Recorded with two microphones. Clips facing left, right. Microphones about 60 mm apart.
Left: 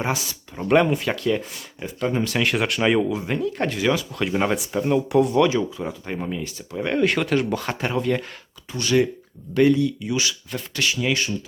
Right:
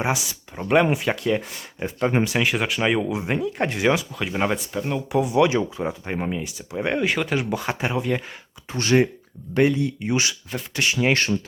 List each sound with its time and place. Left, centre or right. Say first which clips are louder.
0.0 s speech: right 1 dB; centre
1.4 s speech: right 2 dB; right
2.3 s speech: even; centre
3.1 s speech: even; right
4.1 s speech: left 2 dB; centre
5.4 s speech: even; right
7.0 s speech: left 3 dB; centre
8.7 s speech: right 1 dB; right